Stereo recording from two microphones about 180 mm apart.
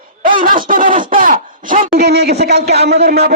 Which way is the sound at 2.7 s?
65° right (ahead or behind).